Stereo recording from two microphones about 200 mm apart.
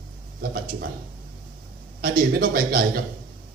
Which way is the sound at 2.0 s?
50° right (ahead or behind).